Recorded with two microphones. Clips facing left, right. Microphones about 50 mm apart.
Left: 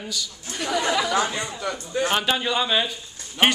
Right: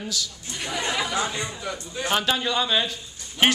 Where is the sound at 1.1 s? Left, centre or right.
Left.